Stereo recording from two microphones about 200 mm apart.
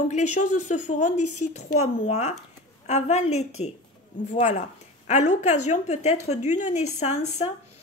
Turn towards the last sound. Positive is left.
turn(degrees=35)  # may be behind; listen again after turning